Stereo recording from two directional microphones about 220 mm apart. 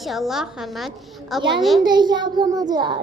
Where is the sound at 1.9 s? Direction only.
20° right (ahead or behind).